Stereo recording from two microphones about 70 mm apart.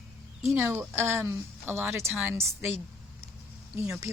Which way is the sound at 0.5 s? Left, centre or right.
Right.